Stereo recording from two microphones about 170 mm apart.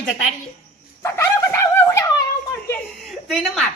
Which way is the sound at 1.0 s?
15° left (ahead or behind).